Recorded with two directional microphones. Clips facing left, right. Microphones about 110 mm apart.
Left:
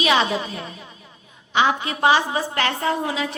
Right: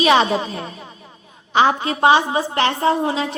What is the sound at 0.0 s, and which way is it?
A woman's voice, 35° right (ahead or behind).